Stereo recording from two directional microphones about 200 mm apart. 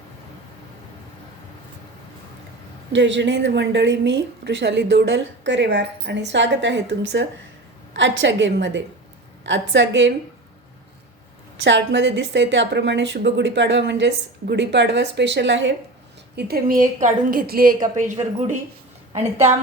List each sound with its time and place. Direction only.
2.9 s a woman's voice: 65° right (ahead or behind)
11.6 s a woman's voice: 65° right (ahead or behind)
16.3 s a woman's voice: 50° right (ahead or behind)